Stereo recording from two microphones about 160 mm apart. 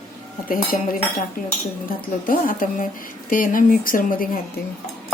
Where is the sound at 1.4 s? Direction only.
60° left (ahead or behind).